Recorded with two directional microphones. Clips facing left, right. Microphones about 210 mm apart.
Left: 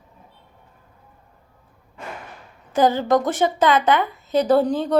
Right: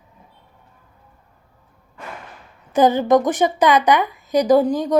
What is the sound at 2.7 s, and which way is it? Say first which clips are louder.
A woman's voice: right 3 dB; 20° right (ahead or behind).